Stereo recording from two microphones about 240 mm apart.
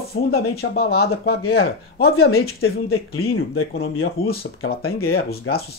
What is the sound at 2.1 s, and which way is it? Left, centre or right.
Speech, left.